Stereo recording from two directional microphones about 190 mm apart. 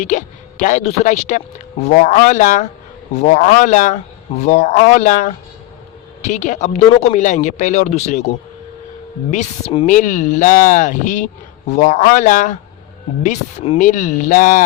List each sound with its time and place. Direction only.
0.0 s speech: 40° left (ahead or behind)
9.3 s speech: 40° left (ahead or behind)